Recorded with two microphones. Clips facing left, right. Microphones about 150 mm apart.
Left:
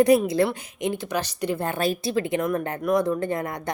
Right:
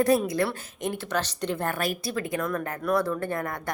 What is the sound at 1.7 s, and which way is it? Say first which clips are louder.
Speech: left 5 dB; 25° left (ahead or behind).